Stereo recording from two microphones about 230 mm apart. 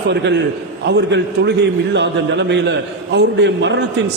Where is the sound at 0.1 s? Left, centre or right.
Right.